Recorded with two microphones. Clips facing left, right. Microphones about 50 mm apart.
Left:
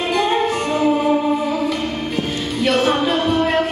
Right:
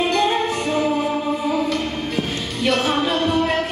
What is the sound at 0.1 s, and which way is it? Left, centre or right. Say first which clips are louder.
Music: left 2 dB; centre.